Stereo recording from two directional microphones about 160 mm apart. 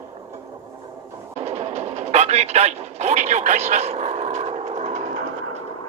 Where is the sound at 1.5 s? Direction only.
45° right (ahead or behind).